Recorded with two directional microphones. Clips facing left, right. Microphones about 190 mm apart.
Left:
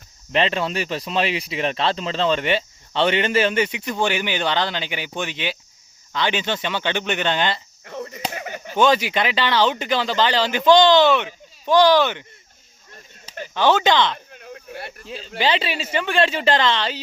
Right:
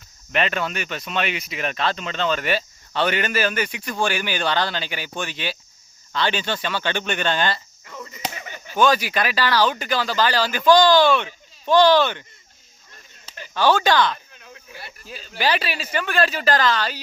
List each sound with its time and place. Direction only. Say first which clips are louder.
0.3 s speech: left 3 dB; 30° left (ahead or behind)
7.9 s chop: left 4 dB; 55° left (ahead or behind)
8.7 s speech: left 1 dB; 25° left (ahead or behind)
13.5 s speech: left 1 dB; 20° left (ahead or behind)
14.3 s a sound: left 7 dB; 55° left (ahead or behind)
15.0 s speech: left 1 dB; 25° left (ahead or behind)